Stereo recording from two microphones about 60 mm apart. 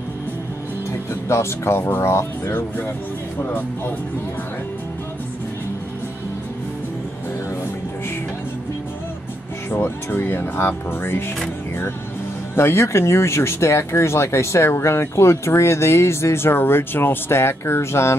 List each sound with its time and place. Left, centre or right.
1.3 s speech: left
9.7 s speech: left
12.5 s speech: left